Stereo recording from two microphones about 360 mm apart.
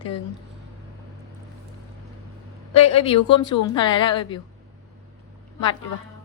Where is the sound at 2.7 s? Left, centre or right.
Centre.